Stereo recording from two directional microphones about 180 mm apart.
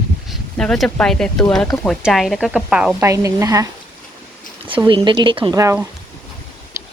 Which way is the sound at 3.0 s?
15° right (ahead or behind).